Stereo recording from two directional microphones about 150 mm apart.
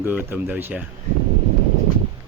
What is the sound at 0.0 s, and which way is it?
Speech, 15° right (ahead or behind).